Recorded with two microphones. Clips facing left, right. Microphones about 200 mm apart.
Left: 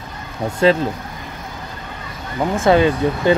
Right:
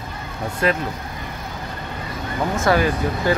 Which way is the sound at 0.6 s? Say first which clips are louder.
Left 7 dB; 25° left (ahead or behind).